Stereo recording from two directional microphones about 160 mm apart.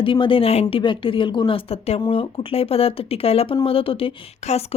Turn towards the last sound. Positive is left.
turn(degrees=40)  # may be behind; listen again after turning